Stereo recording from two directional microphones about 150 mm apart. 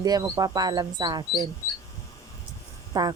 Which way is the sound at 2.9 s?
25° right (ahead or behind).